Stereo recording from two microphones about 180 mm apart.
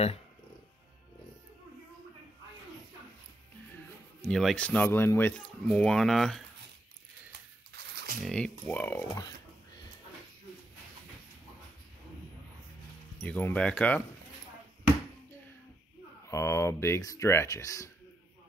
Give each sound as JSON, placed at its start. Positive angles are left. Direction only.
{"t": 4.2, "sound": "speech", "side_deg": 0}
{"t": 7.7, "sound": "a sound", "side_deg": -60}
{"t": 8.3, "sound": "speech", "side_deg": 5}
{"t": 13.2, "sound": "speech", "side_deg": 10}
{"t": 16.3, "sound": "speech", "side_deg": 15}